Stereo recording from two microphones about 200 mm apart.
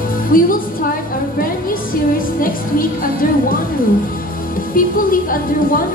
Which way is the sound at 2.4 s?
45° left (ahead or behind).